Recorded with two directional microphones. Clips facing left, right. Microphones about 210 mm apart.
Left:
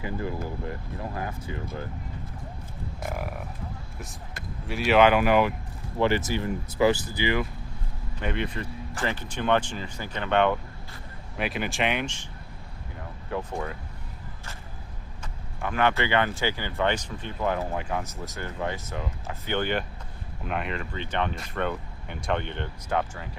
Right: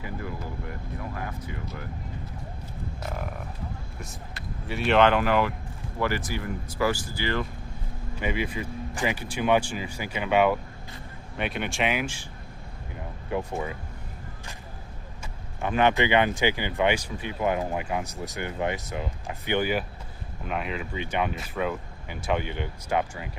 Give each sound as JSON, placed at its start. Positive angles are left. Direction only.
{"t": 0.0, "sound": "speech", "side_deg": 25}
{"t": 3.1, "sound": "speech", "side_deg": 5}
{"t": 4.7, "sound": "speech", "side_deg": 0}
{"t": 8.1, "sound": "speech", "side_deg": -5}
{"t": 13.3, "sound": "speech", "side_deg": -5}
{"t": 15.6, "sound": "speech", "side_deg": -20}